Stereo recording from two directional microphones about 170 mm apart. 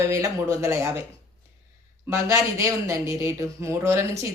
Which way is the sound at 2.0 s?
15° right (ahead or behind).